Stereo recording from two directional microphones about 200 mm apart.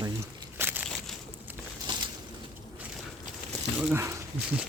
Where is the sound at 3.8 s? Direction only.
10° right (ahead or behind).